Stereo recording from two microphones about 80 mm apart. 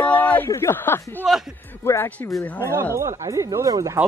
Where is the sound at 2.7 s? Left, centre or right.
Right.